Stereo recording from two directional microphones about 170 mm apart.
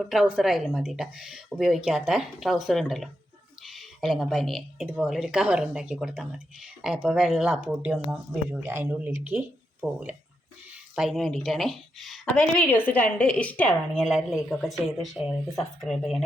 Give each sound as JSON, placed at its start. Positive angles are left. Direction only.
{"t": 0.0, "sound": "speech", "side_deg": 0}